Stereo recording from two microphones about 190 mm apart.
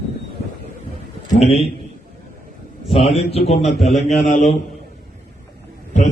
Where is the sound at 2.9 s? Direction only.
30° left (ahead or behind).